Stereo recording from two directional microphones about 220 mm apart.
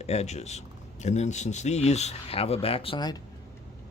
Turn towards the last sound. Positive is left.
turn(degrees=20)  # may be behind; listen again after turning